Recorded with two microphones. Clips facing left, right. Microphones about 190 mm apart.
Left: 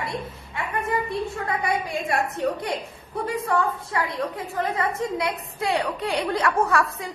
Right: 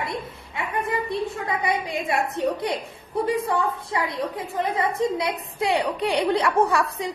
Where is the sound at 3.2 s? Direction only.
20° right (ahead or behind).